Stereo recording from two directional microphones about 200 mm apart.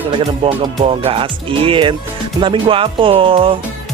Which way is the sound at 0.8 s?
30° right (ahead or behind).